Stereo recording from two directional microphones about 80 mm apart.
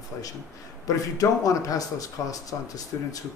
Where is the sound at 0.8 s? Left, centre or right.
Left.